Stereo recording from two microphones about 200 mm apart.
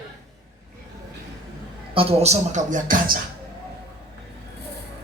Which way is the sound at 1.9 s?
30° right (ahead or behind).